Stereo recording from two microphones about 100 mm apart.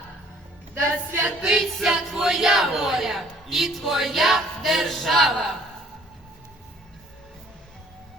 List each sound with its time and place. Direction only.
0.7 s a woman's voice: 20° right (ahead or behind)
1.4 s speech: 5° right (ahead or behind)